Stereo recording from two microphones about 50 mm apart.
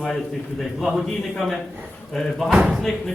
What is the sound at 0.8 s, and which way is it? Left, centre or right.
Speech, centre.